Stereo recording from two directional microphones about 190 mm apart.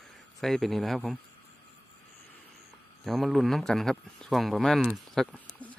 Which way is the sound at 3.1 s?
Centre (ahead or behind).